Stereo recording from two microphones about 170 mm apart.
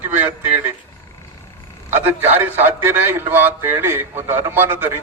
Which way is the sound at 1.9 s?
10° right (ahead or behind).